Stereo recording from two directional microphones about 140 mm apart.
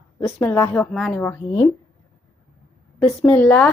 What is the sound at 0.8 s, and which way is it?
Speech, 5° left (ahead or behind).